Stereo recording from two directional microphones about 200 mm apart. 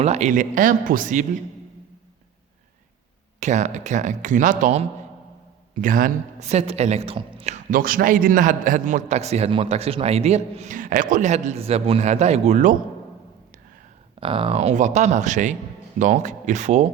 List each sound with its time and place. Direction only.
0.0 s a woman's voice: 35° right (ahead or behind)
3.4 s a woman's voice: 35° right (ahead or behind)
14.2 s a woman's voice: 25° right (ahead or behind)